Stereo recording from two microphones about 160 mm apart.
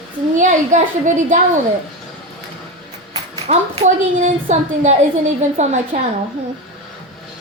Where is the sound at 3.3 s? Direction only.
40° right (ahead or behind).